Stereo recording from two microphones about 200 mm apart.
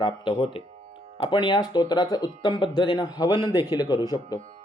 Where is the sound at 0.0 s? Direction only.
25° left (ahead or behind).